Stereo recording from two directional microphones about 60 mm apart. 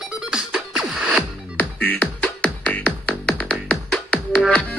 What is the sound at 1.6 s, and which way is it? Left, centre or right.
Music, left.